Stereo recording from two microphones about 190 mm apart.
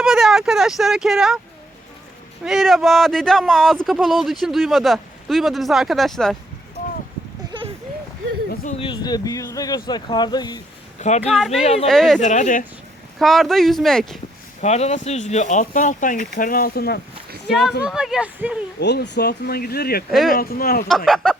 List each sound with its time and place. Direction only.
0.0 s speech: centre (ahead or behind)
2.4 s speech: centre (ahead or behind)
8.8 s speech: 25° left (ahead or behind)
11.2 s speech: centre (ahead or behind)
11.6 s speech: 35° left (ahead or behind)
11.9 s speech: centre (ahead or behind)
12.2 s speech: 40° left (ahead or behind)
13.1 s speech: centre (ahead or behind)
14.6 s speech: 35° left (ahead or behind); by 17.0 s 55° left (ahead or behind)
17.8 s speech: 5° right (ahead or behind)
18.8 s speech: 65° left (ahead or behind)
20.1 s speech: centre (ahead or behind)
20.3 s speech: 50° left (ahead or behind)
20.8 s speech: centre (ahead or behind)